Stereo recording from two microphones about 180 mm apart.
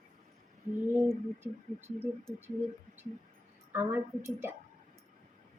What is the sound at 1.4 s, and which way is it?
Speech, 10° right (ahead or behind).